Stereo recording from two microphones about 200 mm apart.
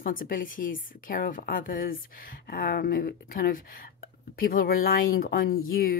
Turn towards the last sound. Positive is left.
turn(degrees=50)  # may be behind; listen again after turning